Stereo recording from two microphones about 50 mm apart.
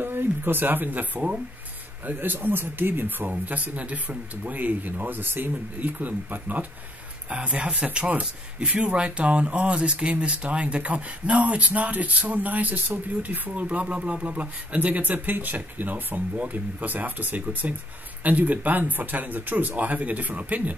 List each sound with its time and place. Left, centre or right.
0.0 s speech: right
7.2 s speech: right